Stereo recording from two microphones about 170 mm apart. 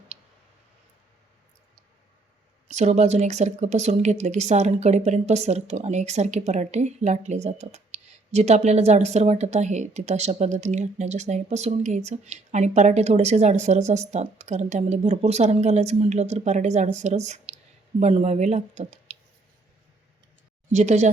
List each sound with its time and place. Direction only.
2.7 s speech: 45° right (ahead or behind)
20.7 s speech: 45° right (ahead or behind)